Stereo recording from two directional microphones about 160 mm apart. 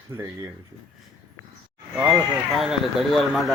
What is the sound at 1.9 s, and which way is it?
Speech, 10° right (ahead or behind).